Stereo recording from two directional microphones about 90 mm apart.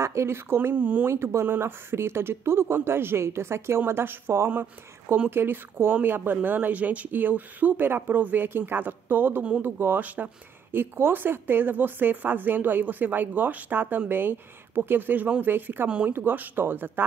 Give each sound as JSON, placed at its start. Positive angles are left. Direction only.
{"t": 0.0, "sound": "speech", "side_deg": -30}
{"t": 1.1, "sound": "speech", "side_deg": -30}